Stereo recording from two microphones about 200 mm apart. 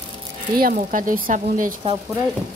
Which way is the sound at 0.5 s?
45° right (ahead or behind).